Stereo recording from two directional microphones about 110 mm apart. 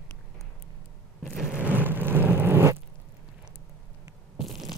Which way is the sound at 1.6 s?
15° right (ahead or behind).